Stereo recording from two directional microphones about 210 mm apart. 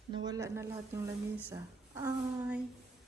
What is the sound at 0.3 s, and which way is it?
Speech, 15° right (ahead or behind).